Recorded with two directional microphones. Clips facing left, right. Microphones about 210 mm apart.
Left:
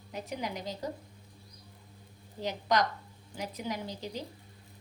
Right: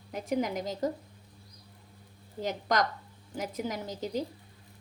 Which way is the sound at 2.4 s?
45° right (ahead or behind).